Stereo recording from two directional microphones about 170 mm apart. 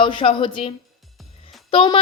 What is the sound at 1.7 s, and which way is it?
Speech, 30° left (ahead or behind).